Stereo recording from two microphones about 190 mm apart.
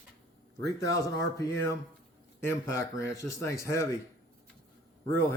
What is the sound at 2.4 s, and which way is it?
Speech, 15° left (ahead or behind).